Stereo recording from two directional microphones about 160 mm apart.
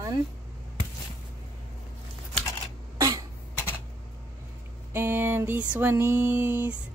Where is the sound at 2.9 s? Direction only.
20° right (ahead or behind).